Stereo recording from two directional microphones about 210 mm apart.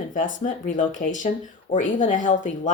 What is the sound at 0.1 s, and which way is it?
Speech, 40° left (ahead or behind).